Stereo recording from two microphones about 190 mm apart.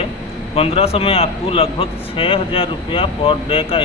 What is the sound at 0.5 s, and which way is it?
A man's voice, 30° left (ahead or behind).